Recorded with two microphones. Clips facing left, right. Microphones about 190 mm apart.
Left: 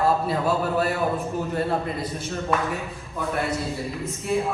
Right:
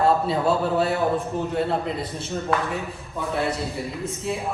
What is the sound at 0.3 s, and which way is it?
Speech, 25° right (ahead or behind).